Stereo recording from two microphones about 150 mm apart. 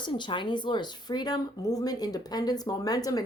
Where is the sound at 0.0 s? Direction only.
30° left (ahead or behind).